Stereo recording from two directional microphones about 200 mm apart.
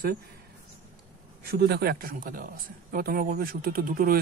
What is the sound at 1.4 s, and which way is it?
Speech, 50° right (ahead or behind).